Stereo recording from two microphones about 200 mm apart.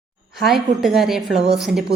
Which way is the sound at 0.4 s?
Centre (ahead or behind).